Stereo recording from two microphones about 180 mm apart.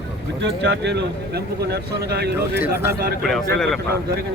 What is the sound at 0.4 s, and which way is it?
Speech, 70° right (ahead or behind).